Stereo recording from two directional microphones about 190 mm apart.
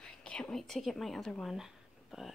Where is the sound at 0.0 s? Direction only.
5° left (ahead or behind).